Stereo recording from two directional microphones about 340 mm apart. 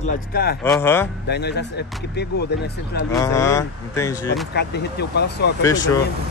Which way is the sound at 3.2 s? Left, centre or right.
Centre.